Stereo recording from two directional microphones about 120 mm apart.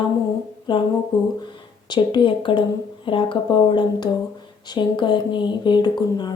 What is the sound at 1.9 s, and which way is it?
Speech, 40° left (ahead or behind).